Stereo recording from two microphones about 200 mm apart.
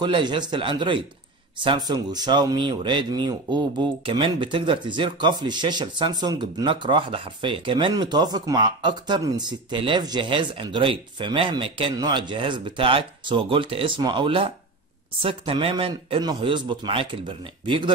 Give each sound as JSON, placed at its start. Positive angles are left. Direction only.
{"t": 0.0, "sound": "speech", "side_deg": -25}